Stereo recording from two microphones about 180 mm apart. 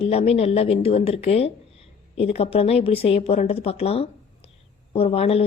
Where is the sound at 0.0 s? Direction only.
35° left (ahead or behind).